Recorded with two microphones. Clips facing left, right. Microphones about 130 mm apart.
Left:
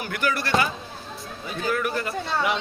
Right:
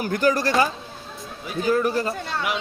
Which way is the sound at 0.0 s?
40° right (ahead or behind).